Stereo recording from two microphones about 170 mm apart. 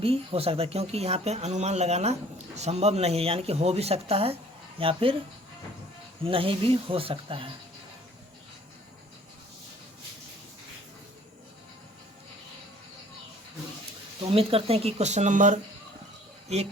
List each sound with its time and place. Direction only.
0.0 s speech: 35° right (ahead or behind)
6.2 s speech: 30° right (ahead or behind)
14.2 s speech: 35° right (ahead or behind)